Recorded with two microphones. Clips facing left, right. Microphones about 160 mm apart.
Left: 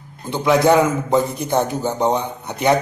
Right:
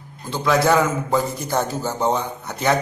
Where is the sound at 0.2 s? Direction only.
20° left (ahead or behind).